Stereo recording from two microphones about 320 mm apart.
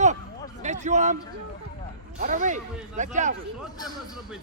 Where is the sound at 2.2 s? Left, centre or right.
Right.